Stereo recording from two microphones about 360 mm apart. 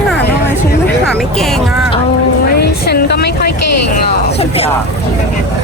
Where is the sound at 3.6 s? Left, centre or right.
Left.